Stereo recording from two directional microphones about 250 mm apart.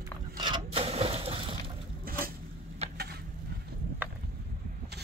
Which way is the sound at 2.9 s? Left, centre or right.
Right.